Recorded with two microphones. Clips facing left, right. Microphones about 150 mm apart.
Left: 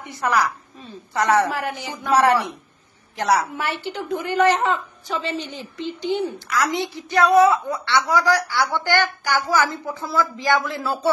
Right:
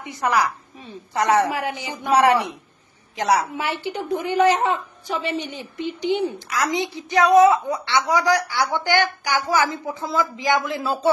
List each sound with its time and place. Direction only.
0.0 s a woman's voice: 15° right (ahead or behind)